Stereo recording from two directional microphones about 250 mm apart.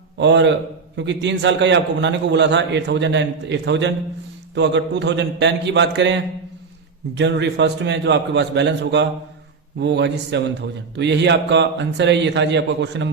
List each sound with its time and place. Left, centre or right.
0.2 s a man's voice: right